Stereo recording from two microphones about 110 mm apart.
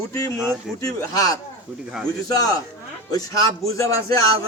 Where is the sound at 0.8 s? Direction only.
35° left (ahead or behind).